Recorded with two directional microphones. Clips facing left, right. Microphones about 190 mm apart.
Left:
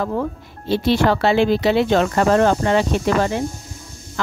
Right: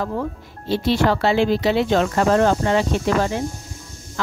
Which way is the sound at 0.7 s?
65° left (ahead or behind).